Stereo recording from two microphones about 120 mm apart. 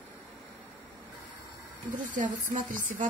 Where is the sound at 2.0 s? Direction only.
90° right.